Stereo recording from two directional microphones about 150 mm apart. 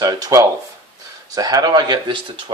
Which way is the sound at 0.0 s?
25° right (ahead or behind).